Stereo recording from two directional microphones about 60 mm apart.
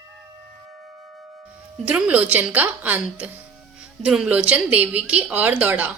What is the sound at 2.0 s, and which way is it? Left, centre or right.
Speech, right.